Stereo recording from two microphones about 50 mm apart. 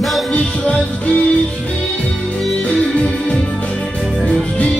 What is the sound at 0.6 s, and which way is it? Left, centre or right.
Music, left.